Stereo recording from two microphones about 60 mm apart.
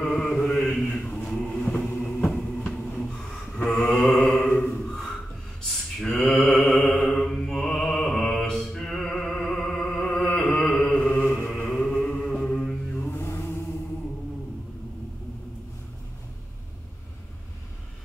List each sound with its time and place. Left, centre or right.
0.0 s mantra: centre
0.8 s a sound: centre
1.4 s vehicle: centre
2.5 s a sound: centre
3.6 s mantra: centre
4.6 s a sound: centre
5.9 s mantra: centre
11.3 s chant: centre
13.1 s mantra: left